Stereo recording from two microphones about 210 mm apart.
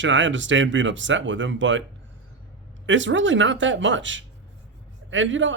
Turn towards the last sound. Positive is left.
turn(degrees=-65)  # may be behind; listen again after turning